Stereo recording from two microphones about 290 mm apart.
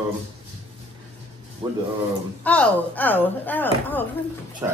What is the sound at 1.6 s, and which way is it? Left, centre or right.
Speech, centre.